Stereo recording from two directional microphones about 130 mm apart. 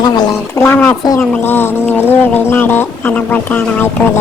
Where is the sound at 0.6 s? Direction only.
15° left (ahead or behind).